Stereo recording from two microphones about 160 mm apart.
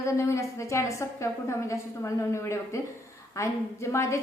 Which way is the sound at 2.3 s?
15° left (ahead or behind).